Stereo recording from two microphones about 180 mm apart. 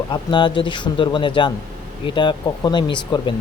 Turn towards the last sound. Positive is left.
turn(degrees=25)  # may be behind; listen again after turning